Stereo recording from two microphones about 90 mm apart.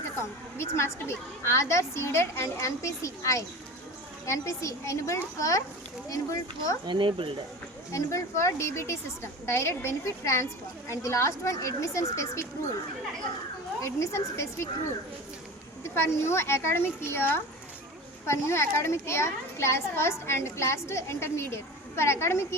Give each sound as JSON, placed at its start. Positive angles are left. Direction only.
{"t": 0.5, "sound": "a woman's voice", "side_deg": 30}
{"t": 6.8, "sound": "speech", "side_deg": -70}
{"t": 7.9, "sound": "a woman's voice", "side_deg": 35}
{"t": 13.8, "sound": "a woman's voice", "side_deg": 30}
{"t": 16.0, "sound": "a child's voice", "side_deg": 30}